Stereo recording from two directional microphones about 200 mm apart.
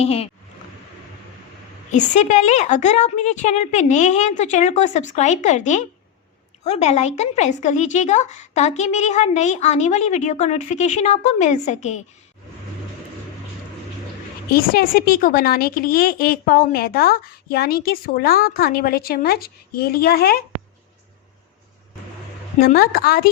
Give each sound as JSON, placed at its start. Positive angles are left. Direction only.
{"t": 0.0, "sound": "speech", "side_deg": 30}
{"t": 1.9, "sound": "speech", "side_deg": 35}
{"t": 14.5, "sound": "a woman's voice", "side_deg": 45}
{"t": 22.6, "sound": "a woman's voice", "side_deg": 50}